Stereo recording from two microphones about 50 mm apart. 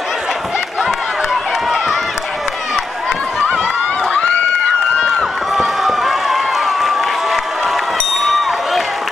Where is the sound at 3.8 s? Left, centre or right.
Centre.